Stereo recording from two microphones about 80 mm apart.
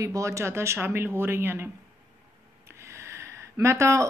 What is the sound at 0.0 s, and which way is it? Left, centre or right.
Speech, right.